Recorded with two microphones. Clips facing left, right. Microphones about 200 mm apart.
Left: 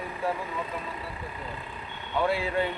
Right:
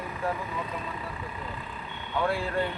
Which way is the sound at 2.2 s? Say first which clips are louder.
Left 1 dB; 5° left (ahead or behind).